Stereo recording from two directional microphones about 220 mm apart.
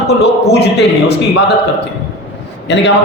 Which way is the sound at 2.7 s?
50° left (ahead or behind).